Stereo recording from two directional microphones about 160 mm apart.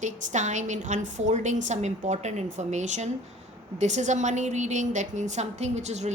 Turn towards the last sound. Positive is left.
turn(degrees=-45)  # may be behind; listen again after turning